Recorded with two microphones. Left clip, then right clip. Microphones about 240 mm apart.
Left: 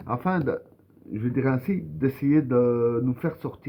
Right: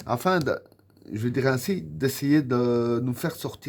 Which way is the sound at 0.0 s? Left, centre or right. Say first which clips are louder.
Right 3 dB; right.